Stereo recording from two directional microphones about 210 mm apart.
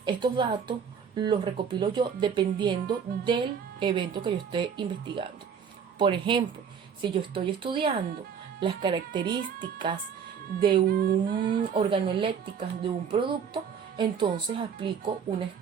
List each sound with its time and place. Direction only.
0.0 s speech: 20° right (ahead or behind)
10.8 s humming: 45° right (ahead or behind)
11.7 s speech: 25° right (ahead or behind)